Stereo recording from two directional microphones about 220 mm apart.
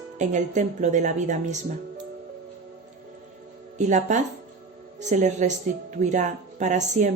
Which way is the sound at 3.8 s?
35° right (ahead or behind).